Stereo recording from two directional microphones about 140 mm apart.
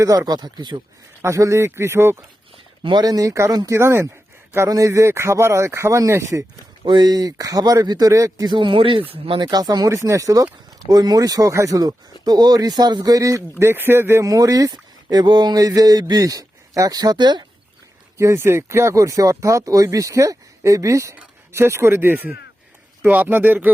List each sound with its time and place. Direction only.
0.0 s speech: 25° right (ahead or behind)
1.2 s speech: 20° right (ahead or behind)
2.8 s speech: 30° right (ahead or behind)
9.5 s speech: 25° right (ahead or behind)
18.2 s speech: 20° right (ahead or behind)